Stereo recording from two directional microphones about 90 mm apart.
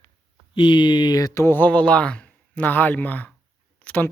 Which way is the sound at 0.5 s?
60° left (ahead or behind).